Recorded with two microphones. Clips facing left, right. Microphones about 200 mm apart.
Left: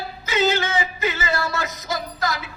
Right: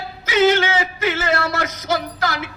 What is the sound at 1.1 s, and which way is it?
Speech, 85° right.